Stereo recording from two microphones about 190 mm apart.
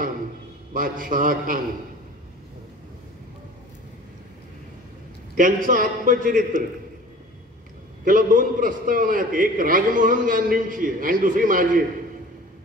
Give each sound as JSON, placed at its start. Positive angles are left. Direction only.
{"t": 0.7, "sound": "a man's voice", "side_deg": -45}
{"t": 5.3, "sound": "a man's voice", "side_deg": -45}
{"t": 8.0, "sound": "a man's voice", "side_deg": -45}